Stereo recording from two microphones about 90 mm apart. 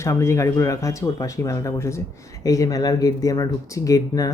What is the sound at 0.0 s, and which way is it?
Speech, 30° left (ahead or behind).